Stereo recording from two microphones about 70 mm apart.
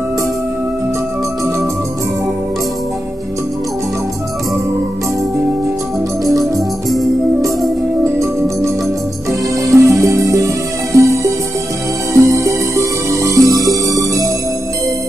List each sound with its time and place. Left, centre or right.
6.5 s music: centre
9.7 s music: right
12.1 s music: right